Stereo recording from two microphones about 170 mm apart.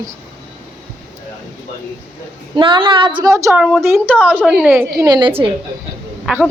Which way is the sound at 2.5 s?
25° right (ahead or behind).